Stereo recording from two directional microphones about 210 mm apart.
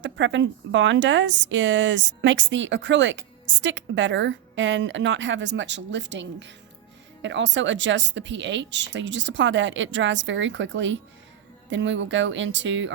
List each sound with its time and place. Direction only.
0.0 s a woman's voice: 60° right (ahead or behind)